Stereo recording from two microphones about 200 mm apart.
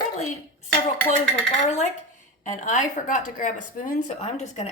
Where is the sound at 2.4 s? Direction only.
40° left (ahead or behind).